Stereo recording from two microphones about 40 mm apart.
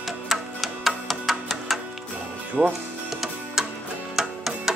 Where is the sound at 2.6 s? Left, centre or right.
Centre.